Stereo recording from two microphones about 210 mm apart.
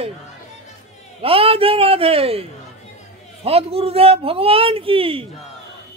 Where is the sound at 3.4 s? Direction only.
30° right (ahead or behind).